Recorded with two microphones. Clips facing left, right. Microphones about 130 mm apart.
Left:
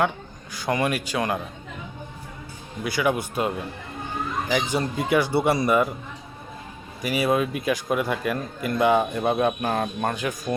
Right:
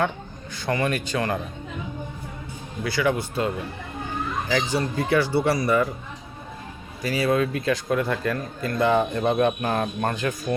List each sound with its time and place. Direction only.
0.5 s speech: 15° left (ahead or behind)
2.8 s speech: 15° left (ahead or behind)
7.0 s speech: 15° left (ahead or behind)